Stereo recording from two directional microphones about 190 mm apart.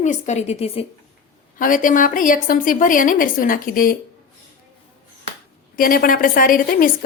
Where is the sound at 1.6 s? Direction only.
45° left (ahead or behind).